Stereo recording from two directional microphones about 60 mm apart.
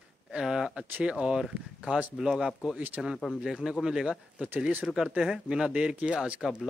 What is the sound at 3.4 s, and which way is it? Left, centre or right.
Speech, centre.